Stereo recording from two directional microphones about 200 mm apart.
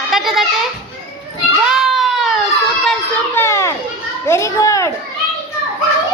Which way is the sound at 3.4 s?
15° left (ahead or behind).